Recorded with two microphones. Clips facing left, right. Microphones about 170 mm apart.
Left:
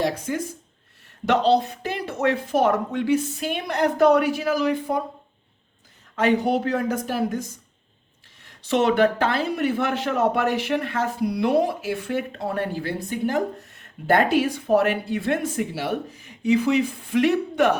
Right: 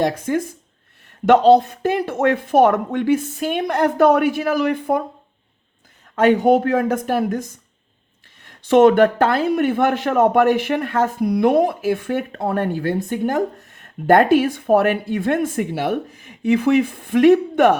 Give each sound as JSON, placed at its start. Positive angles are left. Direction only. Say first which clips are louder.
{"t": 0.0, "sound": "speech", "louder": "right 5 dB", "side_deg": -50}
{"t": 6.1, "sound": "speech", "louder": "right 6 dB", "side_deg": -50}
{"t": 8.4, "sound": "speech", "louder": "right 9 dB", "side_deg": -50}